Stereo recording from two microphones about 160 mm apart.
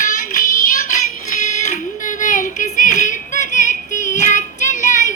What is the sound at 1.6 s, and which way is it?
Child singing, 55° left (ahead or behind).